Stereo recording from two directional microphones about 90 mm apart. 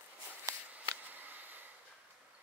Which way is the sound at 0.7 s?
20° right (ahead or behind).